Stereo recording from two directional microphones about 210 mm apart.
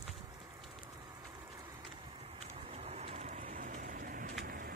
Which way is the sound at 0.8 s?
15° right (ahead or behind).